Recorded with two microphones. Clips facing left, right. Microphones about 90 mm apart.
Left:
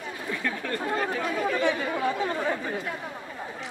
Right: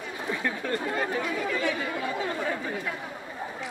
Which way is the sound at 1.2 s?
30° left (ahead or behind).